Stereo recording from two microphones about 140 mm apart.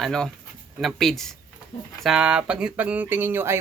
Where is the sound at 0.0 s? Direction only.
5° left (ahead or behind).